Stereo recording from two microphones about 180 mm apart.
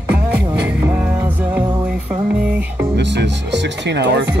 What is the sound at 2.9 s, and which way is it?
Music, 75° right (ahead or behind).